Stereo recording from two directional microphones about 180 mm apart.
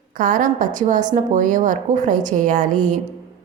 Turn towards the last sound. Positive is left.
turn(degrees=-45)  # may be behind; listen again after turning